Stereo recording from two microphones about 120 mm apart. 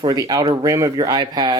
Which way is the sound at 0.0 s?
30° right (ahead or behind).